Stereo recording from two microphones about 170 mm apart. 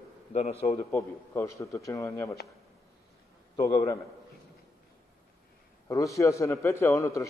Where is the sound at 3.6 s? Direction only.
20° left (ahead or behind).